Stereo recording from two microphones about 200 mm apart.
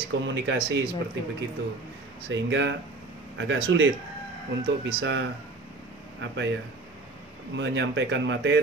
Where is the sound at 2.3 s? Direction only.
65° right (ahead or behind).